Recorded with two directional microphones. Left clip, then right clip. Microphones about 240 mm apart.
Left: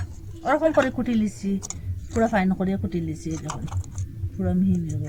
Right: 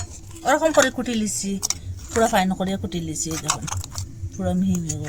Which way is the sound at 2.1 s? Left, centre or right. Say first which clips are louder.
Right 3 dB; centre.